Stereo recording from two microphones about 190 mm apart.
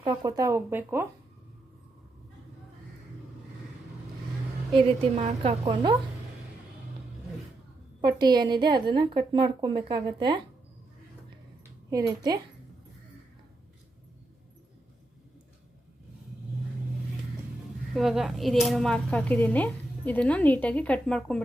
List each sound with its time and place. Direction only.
0.0 s speech: 20° right (ahead or behind)
4.7 s a woman's voice: 25° right (ahead or behind)
8.0 s a woman's voice: 20° right (ahead or behind)
11.9 s a woman's voice: 20° right (ahead or behind)
17.9 s speech: centre (ahead or behind)